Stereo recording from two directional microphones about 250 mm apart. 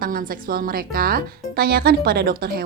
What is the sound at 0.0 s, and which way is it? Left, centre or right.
Speech, right.